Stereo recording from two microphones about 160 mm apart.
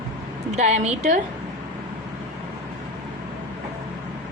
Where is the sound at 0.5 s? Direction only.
45° right (ahead or behind).